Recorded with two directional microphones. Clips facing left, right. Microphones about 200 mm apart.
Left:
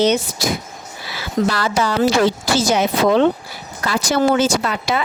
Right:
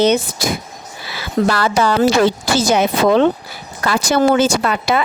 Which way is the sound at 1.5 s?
60° right (ahead or behind).